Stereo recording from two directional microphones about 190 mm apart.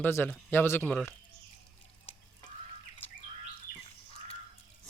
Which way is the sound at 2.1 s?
30° left (ahead or behind).